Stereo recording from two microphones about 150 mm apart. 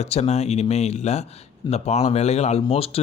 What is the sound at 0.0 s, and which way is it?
Speech, 45° left (ahead or behind).